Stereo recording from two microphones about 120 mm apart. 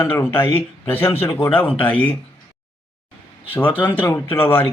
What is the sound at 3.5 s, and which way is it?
Speech, 15° left (ahead or behind).